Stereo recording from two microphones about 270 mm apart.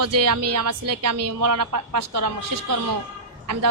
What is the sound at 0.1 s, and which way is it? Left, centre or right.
A woman's voice, right.